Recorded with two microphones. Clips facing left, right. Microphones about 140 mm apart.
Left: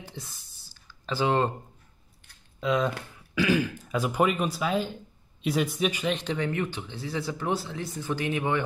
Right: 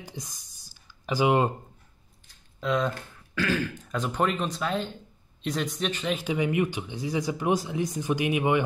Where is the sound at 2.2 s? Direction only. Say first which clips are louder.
Left 4 dB; 65° left (ahead or behind).